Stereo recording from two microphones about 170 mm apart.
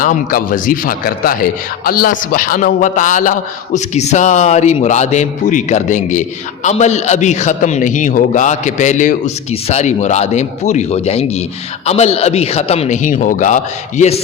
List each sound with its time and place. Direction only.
0.0 s a man's voice: 55° left (ahead or behind)